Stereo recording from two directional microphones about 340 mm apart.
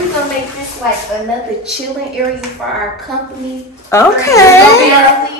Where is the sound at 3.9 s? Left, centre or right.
Centre.